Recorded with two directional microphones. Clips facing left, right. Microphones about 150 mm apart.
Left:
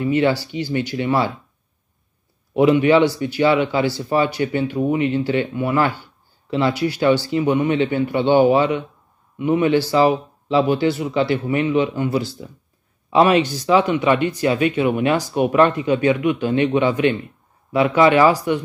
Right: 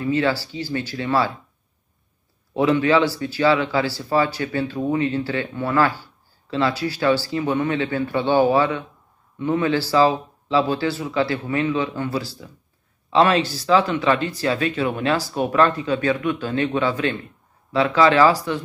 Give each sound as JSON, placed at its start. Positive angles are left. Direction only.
{"t": 0.0, "sound": "speech", "side_deg": 20}
{"t": 2.5, "sound": "speech", "side_deg": 20}